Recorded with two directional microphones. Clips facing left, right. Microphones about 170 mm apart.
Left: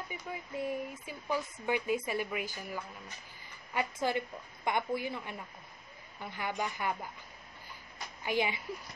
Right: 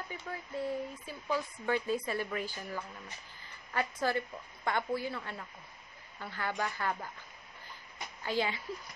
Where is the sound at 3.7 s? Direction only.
15° left (ahead or behind).